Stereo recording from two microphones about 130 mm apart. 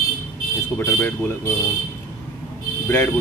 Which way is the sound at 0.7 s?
15° left (ahead or behind).